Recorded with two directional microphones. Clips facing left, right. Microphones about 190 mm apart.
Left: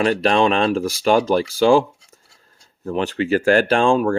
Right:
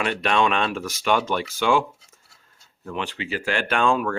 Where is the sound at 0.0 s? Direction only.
35° left (ahead or behind).